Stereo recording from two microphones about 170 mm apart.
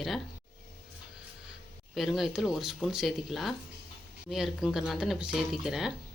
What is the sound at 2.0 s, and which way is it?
Speech, centre (ahead or behind).